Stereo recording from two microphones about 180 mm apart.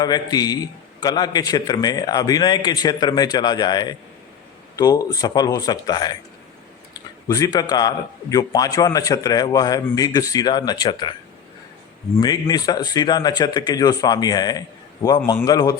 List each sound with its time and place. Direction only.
0.0 s a man's voice: 20° left (ahead or behind)
7.3 s a man's voice: 20° left (ahead or behind)
12.2 s a man's voice: 20° left (ahead or behind)